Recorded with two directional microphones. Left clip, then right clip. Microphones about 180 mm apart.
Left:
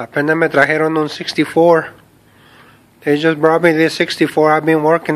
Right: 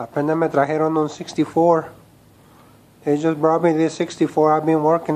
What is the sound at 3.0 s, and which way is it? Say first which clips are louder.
A man's voice: left 5 dB; 15° left (ahead or behind).